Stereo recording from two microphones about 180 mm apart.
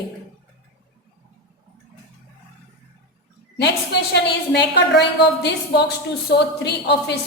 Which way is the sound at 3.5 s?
70° left (ahead or behind).